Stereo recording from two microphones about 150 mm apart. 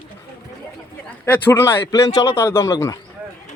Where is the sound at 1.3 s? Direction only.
15° left (ahead or behind).